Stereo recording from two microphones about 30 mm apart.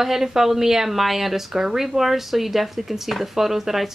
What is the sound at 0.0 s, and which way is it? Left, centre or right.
Speech, centre.